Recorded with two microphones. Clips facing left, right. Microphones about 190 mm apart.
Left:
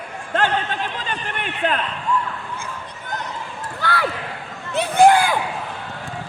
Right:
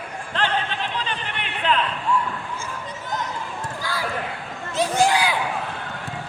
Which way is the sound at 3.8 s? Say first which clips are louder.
Left 5 dB; 65° left (ahead or behind).